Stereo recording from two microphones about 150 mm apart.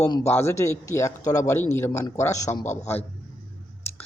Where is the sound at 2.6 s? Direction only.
50° left (ahead or behind).